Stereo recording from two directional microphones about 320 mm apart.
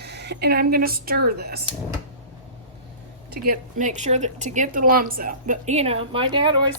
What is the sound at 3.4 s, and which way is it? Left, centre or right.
A woman's voice, right.